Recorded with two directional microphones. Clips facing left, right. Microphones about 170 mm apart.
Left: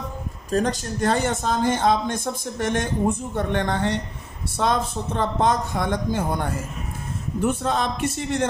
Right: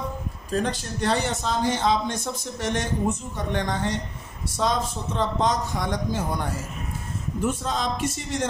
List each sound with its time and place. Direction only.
0.5 s speech: 45° left (ahead or behind)